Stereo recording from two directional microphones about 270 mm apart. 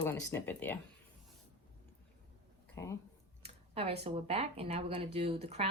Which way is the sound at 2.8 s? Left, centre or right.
Centre.